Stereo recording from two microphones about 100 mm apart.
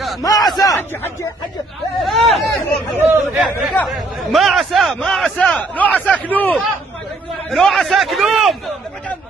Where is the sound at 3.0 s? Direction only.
25° right (ahead or behind).